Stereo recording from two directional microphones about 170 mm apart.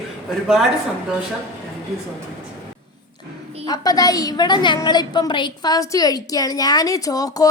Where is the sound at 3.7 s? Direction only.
20° left (ahead or behind).